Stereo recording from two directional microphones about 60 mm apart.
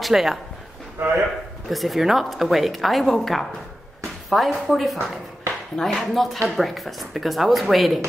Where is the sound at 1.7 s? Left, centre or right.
Centre.